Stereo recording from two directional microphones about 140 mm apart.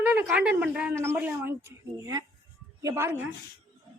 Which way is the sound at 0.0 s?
10° right (ahead or behind).